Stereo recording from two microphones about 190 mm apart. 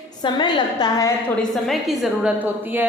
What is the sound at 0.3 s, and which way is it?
Speech, 25° left (ahead or behind).